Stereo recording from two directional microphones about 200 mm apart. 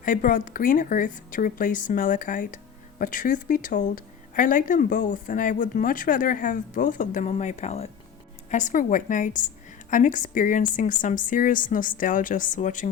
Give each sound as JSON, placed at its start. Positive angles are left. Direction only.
{"t": 0.0, "sound": "a woman's voice", "side_deg": 40}